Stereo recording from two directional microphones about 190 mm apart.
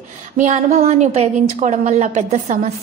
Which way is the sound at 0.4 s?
35° right (ahead or behind).